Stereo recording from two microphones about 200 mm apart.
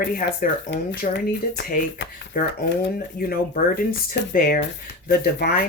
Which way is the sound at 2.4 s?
45° left (ahead or behind).